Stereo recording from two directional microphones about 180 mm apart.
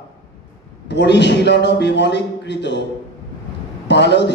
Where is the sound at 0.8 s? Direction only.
75° left (ahead or behind).